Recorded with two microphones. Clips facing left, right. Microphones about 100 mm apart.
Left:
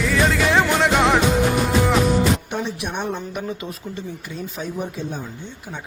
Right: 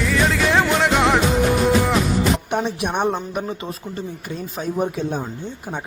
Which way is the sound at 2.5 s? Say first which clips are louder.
Right 4 dB; 55° right (ahead or behind).